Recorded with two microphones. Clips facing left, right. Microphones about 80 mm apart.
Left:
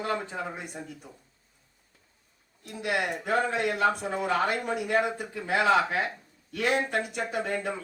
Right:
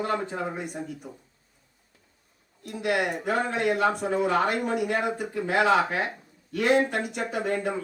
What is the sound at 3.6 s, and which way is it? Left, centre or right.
Speech, right.